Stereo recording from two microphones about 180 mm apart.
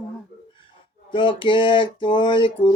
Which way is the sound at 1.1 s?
25° left (ahead or behind).